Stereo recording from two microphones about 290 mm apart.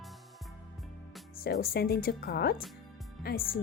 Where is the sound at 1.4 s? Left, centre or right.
Left.